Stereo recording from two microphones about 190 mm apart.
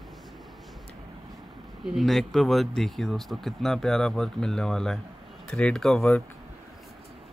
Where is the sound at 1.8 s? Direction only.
Centre (ahead or behind).